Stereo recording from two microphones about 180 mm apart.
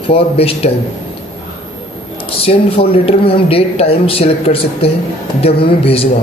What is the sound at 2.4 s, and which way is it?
A man's voice, 30° left (ahead or behind).